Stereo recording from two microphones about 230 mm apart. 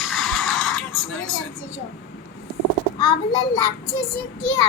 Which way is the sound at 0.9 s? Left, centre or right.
Left.